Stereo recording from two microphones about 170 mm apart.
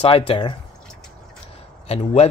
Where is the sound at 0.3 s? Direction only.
30° left (ahead or behind).